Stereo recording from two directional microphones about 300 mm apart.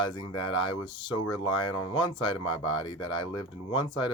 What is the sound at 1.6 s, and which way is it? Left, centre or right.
Speech, centre.